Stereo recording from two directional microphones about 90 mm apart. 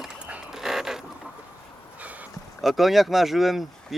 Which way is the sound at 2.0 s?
15° right (ahead or behind).